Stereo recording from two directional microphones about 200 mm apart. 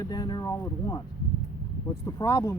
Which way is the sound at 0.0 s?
20° left (ahead or behind).